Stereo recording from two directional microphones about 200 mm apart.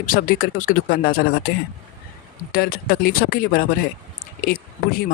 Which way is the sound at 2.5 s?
50° left (ahead or behind).